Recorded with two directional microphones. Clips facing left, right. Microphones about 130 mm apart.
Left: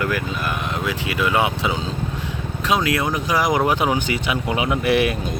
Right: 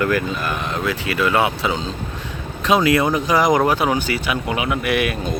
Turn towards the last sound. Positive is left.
turn(degrees=30)  # may be behind; listen again after turning